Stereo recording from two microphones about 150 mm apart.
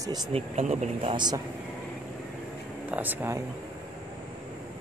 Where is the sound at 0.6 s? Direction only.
50° right (ahead or behind); by 1.4 s 30° right (ahead or behind).